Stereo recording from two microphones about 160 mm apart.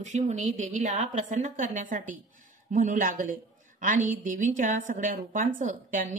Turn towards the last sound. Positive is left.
turn(degrees=-55)  # may be behind; listen again after turning